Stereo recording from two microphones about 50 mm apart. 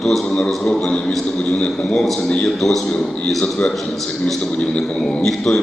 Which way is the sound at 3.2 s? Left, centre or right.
Centre.